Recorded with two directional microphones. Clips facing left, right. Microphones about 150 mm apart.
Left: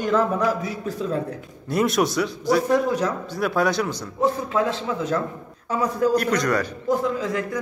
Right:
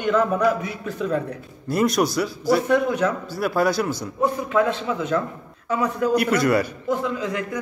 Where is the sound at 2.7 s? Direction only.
35° left (ahead or behind).